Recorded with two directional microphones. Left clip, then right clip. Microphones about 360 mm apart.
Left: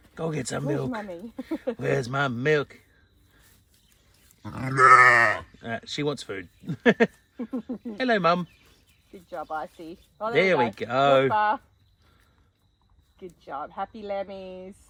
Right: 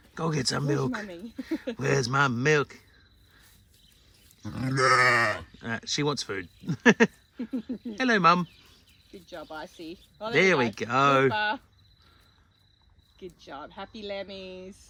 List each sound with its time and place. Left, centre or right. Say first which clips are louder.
0.1 s speech: right 1 dB; centre
1.0 s speech: left 3 dB; left
1.8 s speech: right 2 dB; centre
4.4 s speech: left 7 dB; centre
9.3 s speech: left 7 dB; centre
10.3 s speech: left 1 dB; centre
11.3 s speech: left 5 dB; centre
13.1 s speech: left 6 dB; centre